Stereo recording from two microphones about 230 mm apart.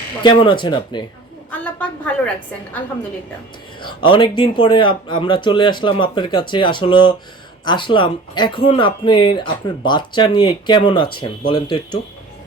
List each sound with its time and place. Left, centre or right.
0.2 s speech: left
1.5 s a woman's voice: centre
3.8 s speech: left